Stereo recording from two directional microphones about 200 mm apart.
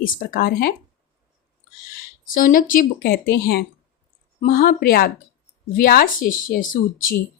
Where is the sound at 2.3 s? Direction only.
45° left (ahead or behind).